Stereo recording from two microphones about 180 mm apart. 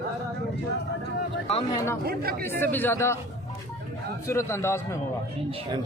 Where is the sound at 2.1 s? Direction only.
55° right (ahead or behind).